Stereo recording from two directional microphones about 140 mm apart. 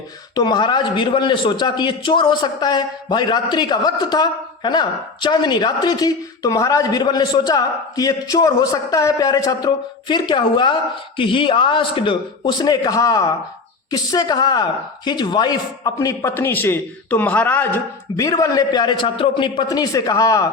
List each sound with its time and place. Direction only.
0.3 s a man's voice: 30° left (ahead or behind); by 17.7 s 15° left (ahead or behind)
18.2 s a man's voice: 25° left (ahead or behind)